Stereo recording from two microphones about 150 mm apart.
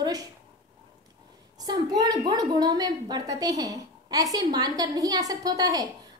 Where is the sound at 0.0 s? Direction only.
25° right (ahead or behind).